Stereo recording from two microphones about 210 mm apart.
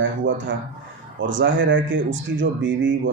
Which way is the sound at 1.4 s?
60° right (ahead or behind).